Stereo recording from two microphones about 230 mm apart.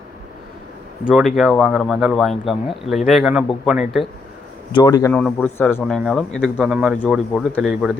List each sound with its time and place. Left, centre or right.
1.0 s speech: centre
4.7 s speech: centre